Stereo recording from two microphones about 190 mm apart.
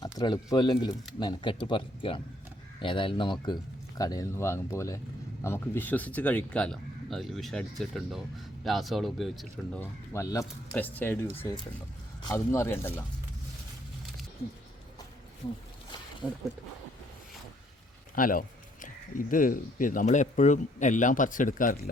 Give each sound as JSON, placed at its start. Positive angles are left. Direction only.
{"t": 0.0, "sound": "speech", "side_deg": 20}
{"t": 18.1, "sound": "speech", "side_deg": 45}